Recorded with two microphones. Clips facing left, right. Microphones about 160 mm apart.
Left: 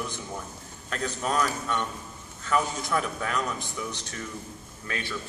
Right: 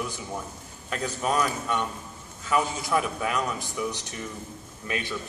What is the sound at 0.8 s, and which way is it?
Speech, 10° right (ahead or behind).